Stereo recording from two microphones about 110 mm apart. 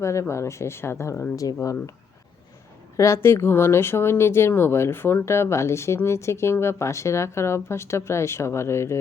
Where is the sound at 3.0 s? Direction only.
25° left (ahead or behind).